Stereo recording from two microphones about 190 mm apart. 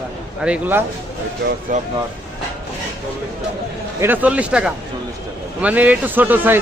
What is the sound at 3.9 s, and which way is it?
Speech, 10° right (ahead or behind).